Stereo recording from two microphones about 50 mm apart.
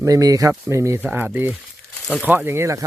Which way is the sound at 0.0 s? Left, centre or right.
Right.